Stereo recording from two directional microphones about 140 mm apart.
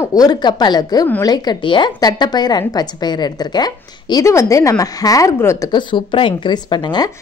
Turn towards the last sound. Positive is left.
turn(degrees=30)  # may be behind; listen again after turning